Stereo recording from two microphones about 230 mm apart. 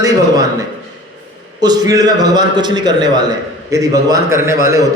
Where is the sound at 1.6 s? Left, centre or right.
Centre.